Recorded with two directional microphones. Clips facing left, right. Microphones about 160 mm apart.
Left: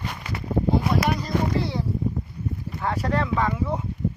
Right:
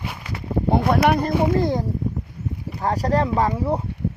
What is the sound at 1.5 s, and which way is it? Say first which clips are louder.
Speech: right 5 dB; 45° right (ahead or behind).